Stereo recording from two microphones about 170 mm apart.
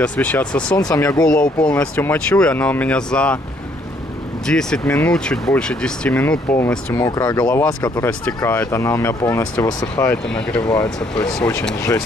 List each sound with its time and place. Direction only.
0.0 s speech: 10° left (ahead or behind)
0.7 s speech: 20° left (ahead or behind)
1.2 s speech: 5° left (ahead or behind)
4.5 s speech: 5° left (ahead or behind)